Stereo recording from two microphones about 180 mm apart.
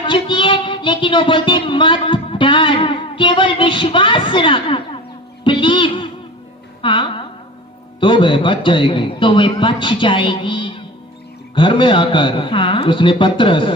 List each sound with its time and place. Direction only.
0.0 s child singing: 25° left (ahead or behind)
5.5 s music: 25° left (ahead or behind)
6.8 s a sound: 25° left (ahead or behind)
8.0 s a man's voice: 25° left (ahead or behind)